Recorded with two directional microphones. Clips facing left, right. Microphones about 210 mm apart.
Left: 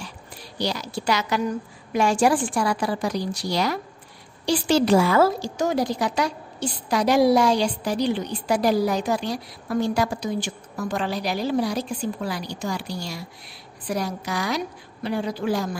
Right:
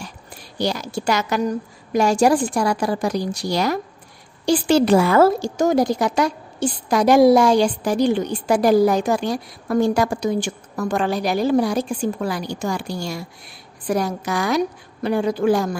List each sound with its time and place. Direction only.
0.0 s a woman's voice: 50° right (ahead or behind)